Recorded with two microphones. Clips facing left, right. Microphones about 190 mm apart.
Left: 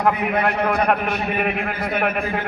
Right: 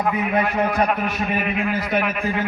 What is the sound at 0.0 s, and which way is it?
A man's voice, 65° left (ahead or behind).